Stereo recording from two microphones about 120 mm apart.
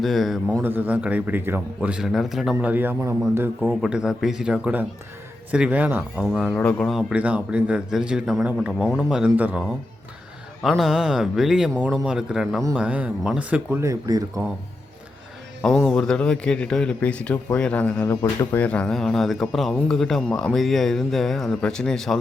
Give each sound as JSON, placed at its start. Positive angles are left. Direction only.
{"t": 0.0, "sound": "speech", "side_deg": 0}
{"t": 0.6, "sound": "speech", "side_deg": -15}
{"t": 2.6, "sound": "speech", "side_deg": -15}
{"t": 3.6, "sound": "speech", "side_deg": -5}
{"t": 6.4, "sound": "speech", "side_deg": 5}
{"t": 6.9, "sound": "speech", "side_deg": -10}
{"t": 10.6, "sound": "speech", "side_deg": 0}
{"t": 13.8, "sound": "speech", "side_deg": -30}
{"t": 15.6, "sound": "a man's voice", "side_deg": 5}